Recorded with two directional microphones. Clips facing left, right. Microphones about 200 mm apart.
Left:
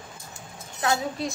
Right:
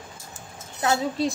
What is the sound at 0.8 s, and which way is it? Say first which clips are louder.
Speech: right 3 dB; 30° right (ahead or behind).